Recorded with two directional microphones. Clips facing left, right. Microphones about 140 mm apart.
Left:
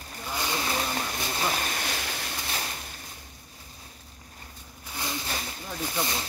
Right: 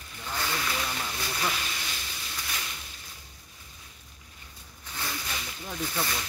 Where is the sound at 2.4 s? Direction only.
40° left (ahead or behind).